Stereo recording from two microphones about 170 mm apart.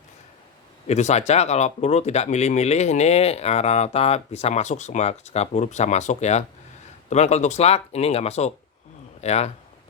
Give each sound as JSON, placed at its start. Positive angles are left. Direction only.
{"t": 0.9, "sound": "speech", "side_deg": 40}